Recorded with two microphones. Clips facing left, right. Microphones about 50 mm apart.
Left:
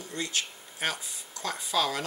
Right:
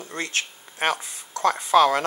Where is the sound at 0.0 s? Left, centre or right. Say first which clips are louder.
Right 5 dB; right.